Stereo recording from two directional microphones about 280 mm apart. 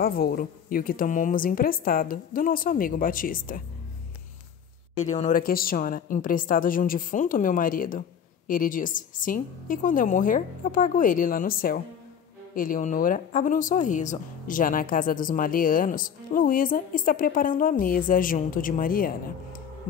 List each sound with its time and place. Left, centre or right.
0.0 s a woman's voice: left
4.9 s speech: left